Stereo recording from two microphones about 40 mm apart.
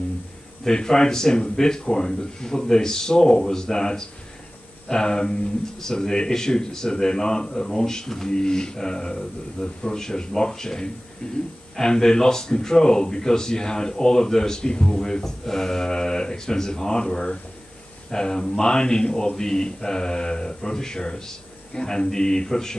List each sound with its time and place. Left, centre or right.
0.7 s speech: centre